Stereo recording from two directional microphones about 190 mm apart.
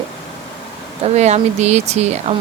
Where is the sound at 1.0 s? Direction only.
35° right (ahead or behind).